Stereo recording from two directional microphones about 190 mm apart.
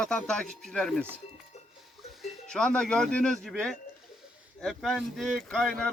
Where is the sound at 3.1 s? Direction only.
5° left (ahead or behind).